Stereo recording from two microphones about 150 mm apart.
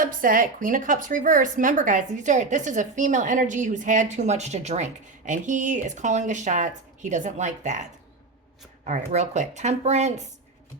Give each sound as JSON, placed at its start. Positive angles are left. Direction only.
{"t": 0.0, "sound": "a woman's voice", "side_deg": -65}
{"t": 8.9, "sound": "speech", "side_deg": -50}